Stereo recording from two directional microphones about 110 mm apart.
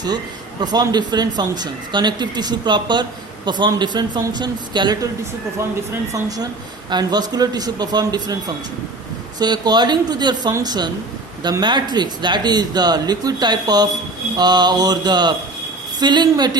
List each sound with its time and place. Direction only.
0.6 s speech: 40° right (ahead or behind)
6.1 s speech: 35° right (ahead or behind)
9.4 s speech: 40° right (ahead or behind)